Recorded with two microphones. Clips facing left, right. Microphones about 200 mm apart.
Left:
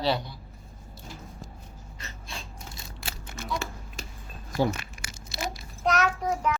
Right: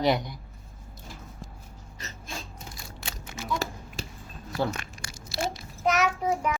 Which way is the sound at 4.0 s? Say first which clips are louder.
Right 4 dB; 30° right (ahead or behind).